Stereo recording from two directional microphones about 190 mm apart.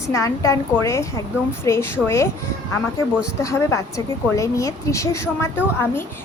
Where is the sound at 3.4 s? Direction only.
15° left (ahead or behind).